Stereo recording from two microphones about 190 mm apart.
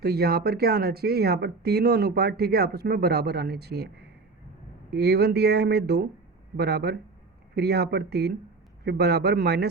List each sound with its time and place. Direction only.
0.0 s speech: 55° right (ahead or behind)